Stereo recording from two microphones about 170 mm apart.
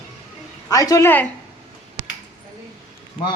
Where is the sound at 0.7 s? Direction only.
20° left (ahead or behind).